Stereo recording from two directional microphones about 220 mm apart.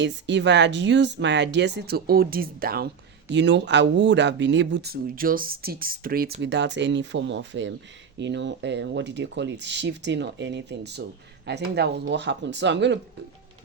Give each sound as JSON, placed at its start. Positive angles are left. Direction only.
{"t": 0.0, "sound": "speech", "side_deg": -55}
{"t": 6.4, "sound": "speech", "side_deg": -50}